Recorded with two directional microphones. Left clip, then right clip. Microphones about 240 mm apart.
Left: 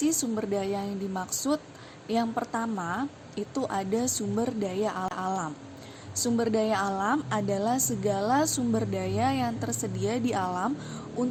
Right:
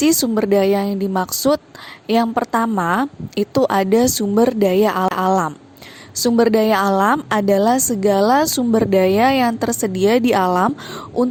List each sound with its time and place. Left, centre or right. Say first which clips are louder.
0.0 s a woman's voice: right 12 dB; right